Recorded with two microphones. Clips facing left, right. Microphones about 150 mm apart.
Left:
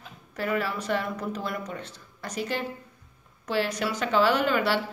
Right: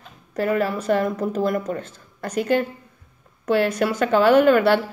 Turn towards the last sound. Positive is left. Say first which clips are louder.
# right 10 dB
turn(degrees=-50)  # may be behind; listen again after turning